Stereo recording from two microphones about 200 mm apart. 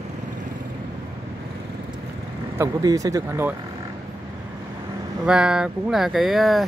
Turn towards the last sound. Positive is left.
turn(degrees=0)  # may be behind; listen again after turning